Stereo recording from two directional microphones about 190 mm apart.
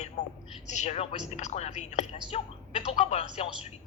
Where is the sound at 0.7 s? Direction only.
35° left (ahead or behind).